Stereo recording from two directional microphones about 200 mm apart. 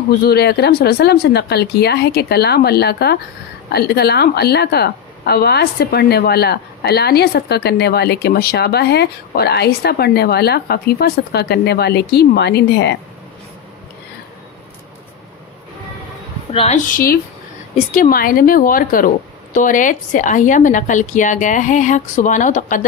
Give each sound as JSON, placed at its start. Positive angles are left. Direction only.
{"t": 0.2, "sound": "a woman's voice", "side_deg": 55}
{"t": 16.5, "sound": "a woman's voice", "side_deg": 35}